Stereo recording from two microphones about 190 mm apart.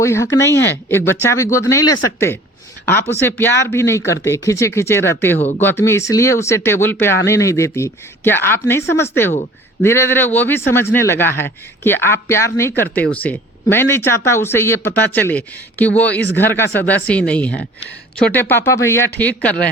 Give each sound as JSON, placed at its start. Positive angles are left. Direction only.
{"t": 0.0, "sound": "speech", "side_deg": 15}